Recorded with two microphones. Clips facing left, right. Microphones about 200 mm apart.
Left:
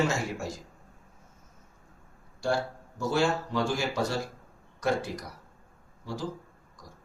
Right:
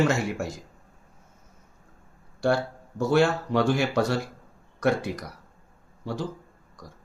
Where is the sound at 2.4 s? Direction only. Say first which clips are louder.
Right 5 dB; 60° right (ahead or behind).